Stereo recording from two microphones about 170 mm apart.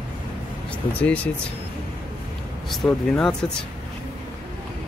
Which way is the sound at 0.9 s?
10° left (ahead or behind).